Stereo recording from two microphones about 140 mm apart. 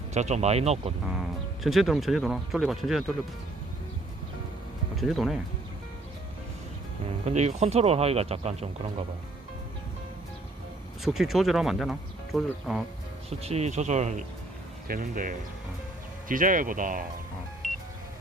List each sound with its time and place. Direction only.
0.1 s speech: 55° right (ahead or behind)
1.0 s speech: centre (ahead or behind)
4.9 s speech: centre (ahead or behind)
7.3 s speech: 50° right (ahead or behind)
11.0 s speech: 5° right (ahead or behind)
13.4 s speech: 50° right (ahead or behind)
14.8 s speech: 80° right
17.6 s music: 65° right (ahead or behind)